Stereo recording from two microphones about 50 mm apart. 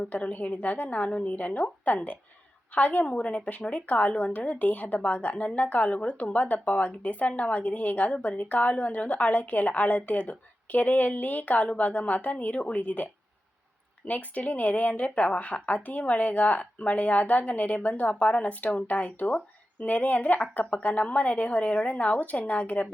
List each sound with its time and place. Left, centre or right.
0.1 s speech: left
14.1 s speech: left